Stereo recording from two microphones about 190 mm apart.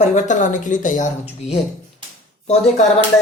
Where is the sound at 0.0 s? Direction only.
40° left (ahead or behind).